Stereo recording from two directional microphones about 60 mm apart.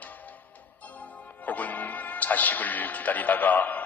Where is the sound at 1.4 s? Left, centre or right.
Left.